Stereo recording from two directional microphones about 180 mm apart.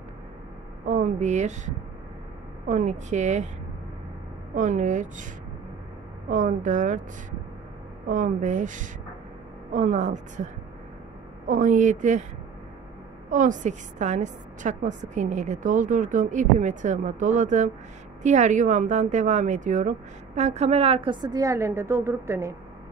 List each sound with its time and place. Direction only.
0.8 s a woman's voice: 40° right (ahead or behind)
2.7 s a woman's voice: 40° right (ahead or behind)
4.6 s speech: 45° right (ahead or behind)
8.1 s speech: 45° right (ahead or behind)
13.3 s a woman's voice: 45° right (ahead or behind); by 22.6 s 15° right (ahead or behind)